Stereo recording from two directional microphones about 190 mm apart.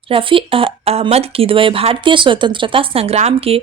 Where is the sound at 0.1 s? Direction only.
25° right (ahead or behind).